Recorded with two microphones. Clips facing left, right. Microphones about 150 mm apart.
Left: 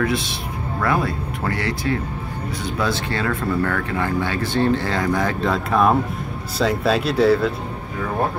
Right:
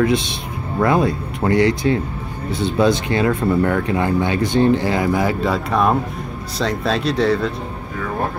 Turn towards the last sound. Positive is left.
turn(degrees=5)  # may be behind; listen again after turning